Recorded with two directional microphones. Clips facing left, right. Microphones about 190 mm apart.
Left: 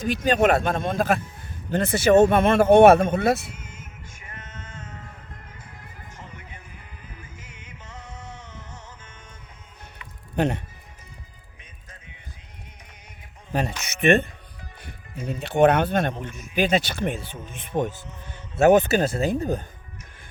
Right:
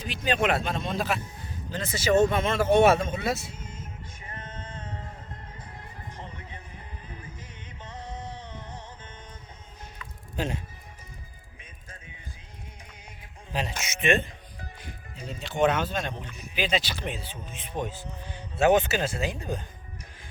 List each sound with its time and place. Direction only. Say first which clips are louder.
0.0 s speech: left 7 dB; 45° left (ahead or behind)
3.5 s music: right 1 dB; 30° right (ahead or behind)
6.1 s music: even; 30° right (ahead or behind)
10.3 s speech: left 8 dB; 65° left (ahead or behind)
13.5 s speech: left 5 dB; 55° left (ahead or behind)